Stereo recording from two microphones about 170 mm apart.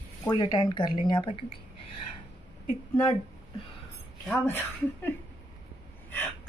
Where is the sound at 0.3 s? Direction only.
25° left (ahead or behind).